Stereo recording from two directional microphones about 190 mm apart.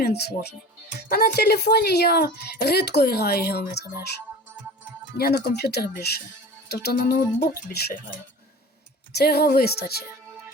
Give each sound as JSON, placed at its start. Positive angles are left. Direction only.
{"t": 0.0, "sound": "a woman's voice", "side_deg": 60}
{"t": 5.1, "sound": "a woman's voice", "side_deg": 55}
{"t": 9.1, "sound": "a woman's voice", "side_deg": 55}